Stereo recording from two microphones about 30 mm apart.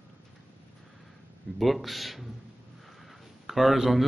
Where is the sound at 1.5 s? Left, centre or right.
Centre.